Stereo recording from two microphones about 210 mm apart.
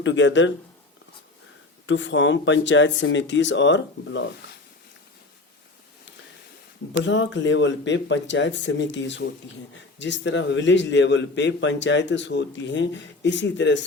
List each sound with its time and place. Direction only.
0.0 s a man's voice: 60° left (ahead or behind)
1.9 s a man's voice: 60° left (ahead or behind)
7.0 s a man's voice: 60° left (ahead or behind)